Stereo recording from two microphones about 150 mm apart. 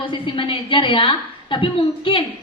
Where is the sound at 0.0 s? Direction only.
35° left (ahead or behind).